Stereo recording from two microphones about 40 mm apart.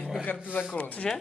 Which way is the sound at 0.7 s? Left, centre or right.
Left.